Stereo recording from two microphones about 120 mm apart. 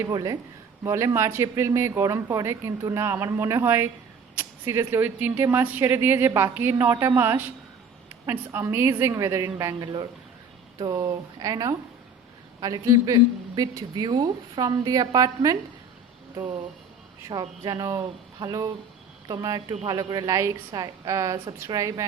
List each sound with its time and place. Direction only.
0.0 s a woman's voice: 30° right (ahead or behind)
17.3 s a woman's voice: 40° right (ahead or behind)